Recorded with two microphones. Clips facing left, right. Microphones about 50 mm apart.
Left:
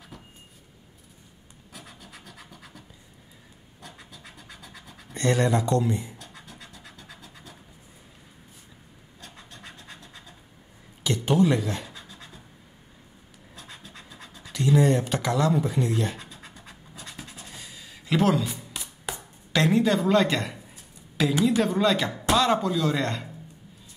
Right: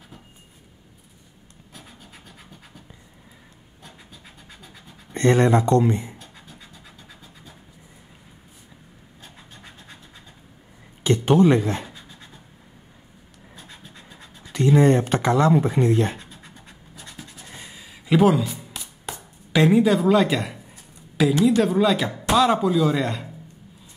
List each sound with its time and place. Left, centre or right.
1.8 s scratch: centre
3.8 s scratch: centre
5.1 s speech: right
6.3 s scratch: centre
9.2 s scratch: centre
11.1 s speech: right
11.9 s a sound: centre
13.6 s scratch: centre
14.5 s speech: right
17.5 s a sound: right
17.8 s a sound: centre
19.5 s speech: centre